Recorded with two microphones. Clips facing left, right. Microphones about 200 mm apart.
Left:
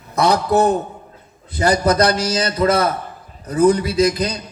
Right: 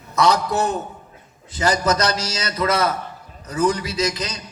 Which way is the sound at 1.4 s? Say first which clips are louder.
Left 4 dB; 55° left (ahead or behind).